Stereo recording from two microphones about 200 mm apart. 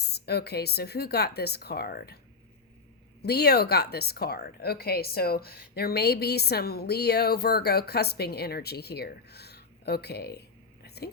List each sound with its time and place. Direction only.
0.0 s speech: 55° left (ahead or behind)
3.2 s speech: 55° left (ahead or behind)
10.8 s a sound: 55° left (ahead or behind)